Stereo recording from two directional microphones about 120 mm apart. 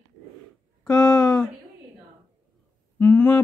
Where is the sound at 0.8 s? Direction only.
10° left (ahead or behind).